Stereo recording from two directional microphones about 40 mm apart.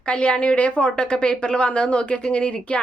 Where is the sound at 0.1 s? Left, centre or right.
Left.